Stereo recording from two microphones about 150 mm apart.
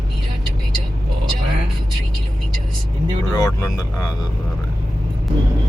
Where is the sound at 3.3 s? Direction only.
25° left (ahead or behind).